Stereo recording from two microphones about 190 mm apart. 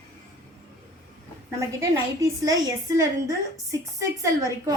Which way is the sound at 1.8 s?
15° right (ahead or behind).